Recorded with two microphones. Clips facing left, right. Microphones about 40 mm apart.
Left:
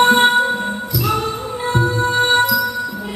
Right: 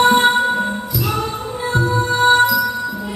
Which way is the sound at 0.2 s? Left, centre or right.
Centre.